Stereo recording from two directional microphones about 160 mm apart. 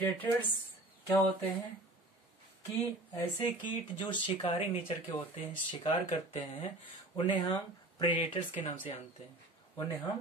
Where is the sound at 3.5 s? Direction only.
30° left (ahead or behind).